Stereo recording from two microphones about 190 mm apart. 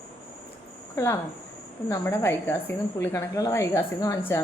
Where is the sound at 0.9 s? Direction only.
15° left (ahead or behind).